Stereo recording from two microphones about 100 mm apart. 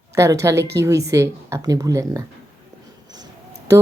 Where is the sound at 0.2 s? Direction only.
30° right (ahead or behind).